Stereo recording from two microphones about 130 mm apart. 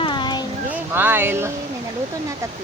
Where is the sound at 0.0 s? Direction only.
35° left (ahead or behind).